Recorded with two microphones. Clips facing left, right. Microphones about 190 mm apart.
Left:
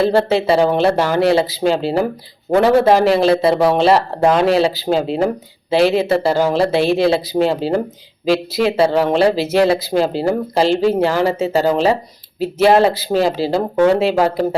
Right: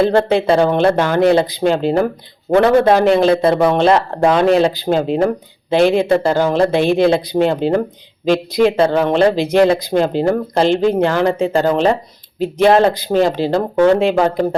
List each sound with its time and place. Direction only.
0.0 s speech: 5° left (ahead or behind)